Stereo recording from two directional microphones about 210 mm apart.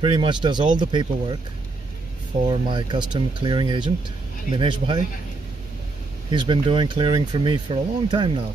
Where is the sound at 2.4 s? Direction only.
20° right (ahead or behind).